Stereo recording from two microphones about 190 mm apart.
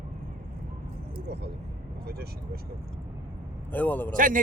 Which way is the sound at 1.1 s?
60° right (ahead or behind).